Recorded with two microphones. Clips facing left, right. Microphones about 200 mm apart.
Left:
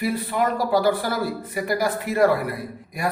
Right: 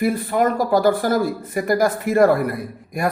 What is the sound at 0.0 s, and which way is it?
Speech, 50° right (ahead or behind).